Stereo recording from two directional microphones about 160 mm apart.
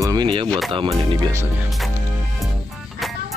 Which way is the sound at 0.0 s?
25° right (ahead or behind).